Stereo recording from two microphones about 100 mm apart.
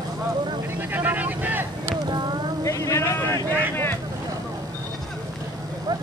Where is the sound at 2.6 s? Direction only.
30° left (ahead or behind).